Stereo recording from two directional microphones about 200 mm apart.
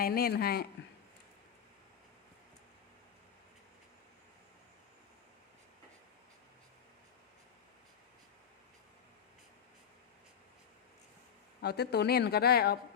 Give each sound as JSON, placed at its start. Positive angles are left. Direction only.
{"t": 0.0, "sound": "speech", "side_deg": 50}
{"t": 11.6, "sound": "speech", "side_deg": 55}